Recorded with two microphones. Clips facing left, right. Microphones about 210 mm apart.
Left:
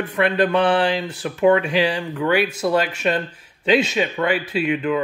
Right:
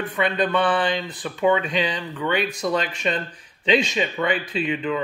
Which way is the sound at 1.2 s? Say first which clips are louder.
Left 4 dB; 5° left (ahead or behind).